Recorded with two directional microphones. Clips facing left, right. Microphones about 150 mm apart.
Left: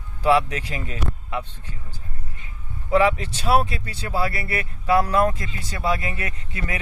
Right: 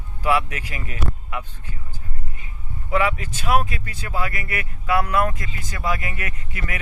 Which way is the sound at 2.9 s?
35° left (ahead or behind).